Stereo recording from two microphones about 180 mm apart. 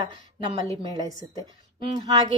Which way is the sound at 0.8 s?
20° right (ahead or behind).